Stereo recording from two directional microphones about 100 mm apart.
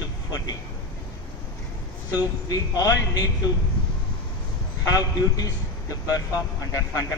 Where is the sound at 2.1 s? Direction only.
40° left (ahead or behind).